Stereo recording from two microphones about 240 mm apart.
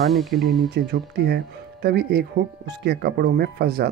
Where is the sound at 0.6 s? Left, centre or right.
Right.